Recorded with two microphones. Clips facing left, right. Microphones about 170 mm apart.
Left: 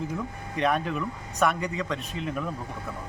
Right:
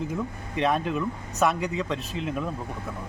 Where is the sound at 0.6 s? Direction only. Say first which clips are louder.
Right 1 dB; 25° right (ahead or behind).